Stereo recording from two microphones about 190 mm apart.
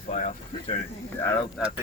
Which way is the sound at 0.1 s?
40° left (ahead or behind).